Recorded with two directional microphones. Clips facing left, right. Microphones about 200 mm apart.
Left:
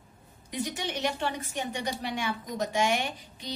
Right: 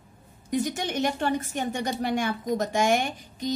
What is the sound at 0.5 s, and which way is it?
A woman's voice, 45° right (ahead or behind).